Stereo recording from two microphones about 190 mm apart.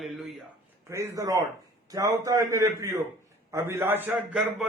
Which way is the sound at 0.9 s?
15° right (ahead or behind).